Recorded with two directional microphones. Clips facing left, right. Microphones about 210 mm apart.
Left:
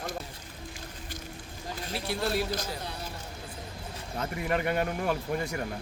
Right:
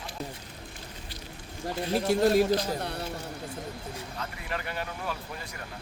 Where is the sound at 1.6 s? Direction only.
65° right (ahead or behind).